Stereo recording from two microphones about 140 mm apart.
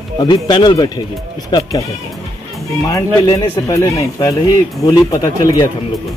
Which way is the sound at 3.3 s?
30° left (ahead or behind).